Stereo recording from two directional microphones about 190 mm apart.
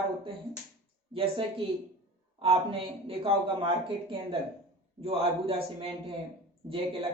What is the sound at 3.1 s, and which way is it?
Speech, 30° right (ahead or behind).